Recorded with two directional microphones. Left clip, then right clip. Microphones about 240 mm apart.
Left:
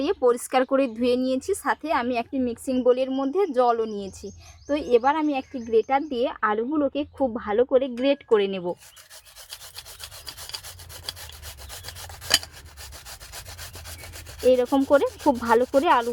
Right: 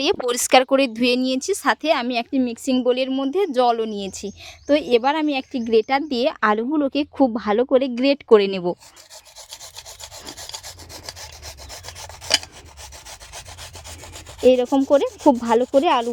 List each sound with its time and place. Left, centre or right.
0.0 s speech: right
9.5 s rub: centre
14.5 s speech: right